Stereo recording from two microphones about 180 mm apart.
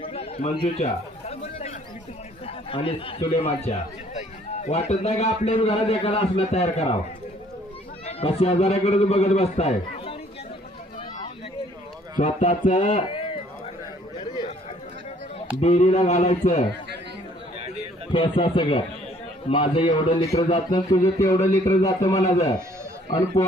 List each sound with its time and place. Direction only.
0.0 s a sound: 35° left (ahead or behind)
1.3 s chatter: 35° left (ahead or behind)
2.5 s a man's voice: 30° left (ahead or behind)
8.0 s a man's voice: 35° left (ahead or behind)
12.1 s a man's voice: 40° left (ahead or behind)
14.2 s a sound: 25° left (ahead or behind)
15.6 s a man's voice: 40° left (ahead or behind)
18.1 s a man's voice: 25° left (ahead or behind)